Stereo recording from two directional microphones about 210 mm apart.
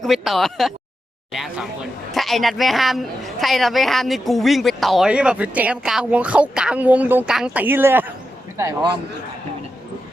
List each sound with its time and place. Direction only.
0.0 s a man's voice: centre (ahead or behind); by 8.9 s 15° right (ahead or behind)